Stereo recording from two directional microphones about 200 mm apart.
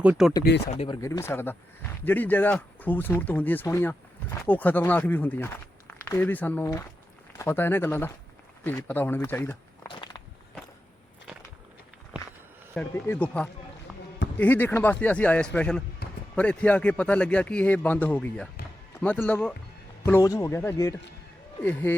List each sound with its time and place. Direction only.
0.0 s speech: 5° right (ahead or behind)
0.7 s speech: 30° left (ahead or behind)
1.0 s speech: 15° left (ahead or behind)
9.9 s a sound: 20° left (ahead or behind)
12.7 s speech: 5° left (ahead or behind)